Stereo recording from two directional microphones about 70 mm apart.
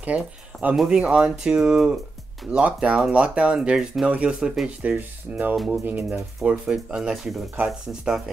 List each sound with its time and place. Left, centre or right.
0.0 s speech: right
0.7 s speech: centre